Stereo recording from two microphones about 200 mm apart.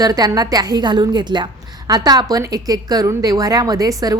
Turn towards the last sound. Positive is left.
turn(degrees=-20)  # may be behind; listen again after turning